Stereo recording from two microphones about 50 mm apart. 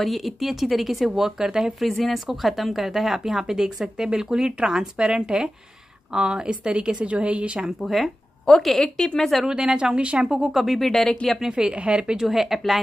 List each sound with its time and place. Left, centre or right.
0.0 s speech: centre
1.9 s speech: centre; by 7.6 s right
7.8 s speech: centre
9.5 s speech: centre
10.9 s speech: centre
11.2 s speech: centre
12.3 s speech: centre